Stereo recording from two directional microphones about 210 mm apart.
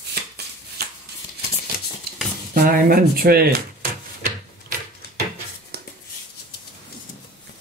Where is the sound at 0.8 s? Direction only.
50° right (ahead or behind).